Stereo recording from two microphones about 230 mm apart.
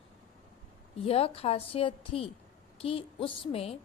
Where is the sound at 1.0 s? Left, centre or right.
Left.